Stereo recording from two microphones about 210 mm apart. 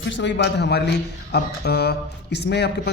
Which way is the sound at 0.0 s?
60° left (ahead or behind).